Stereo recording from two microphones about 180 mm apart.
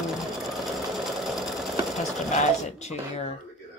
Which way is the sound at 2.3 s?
40° left (ahead or behind).